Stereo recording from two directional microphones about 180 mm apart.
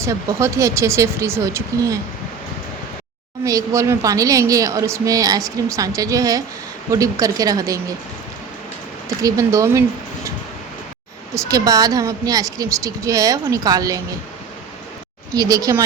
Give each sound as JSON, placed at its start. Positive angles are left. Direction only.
{"t": 0.0, "sound": "speech", "side_deg": -15}
{"t": 3.4, "sound": "speech", "side_deg": -15}
{"t": 9.2, "sound": "speech", "side_deg": -20}
{"t": 11.3, "sound": "speech", "side_deg": -20}
{"t": 15.4, "sound": "speech", "side_deg": -20}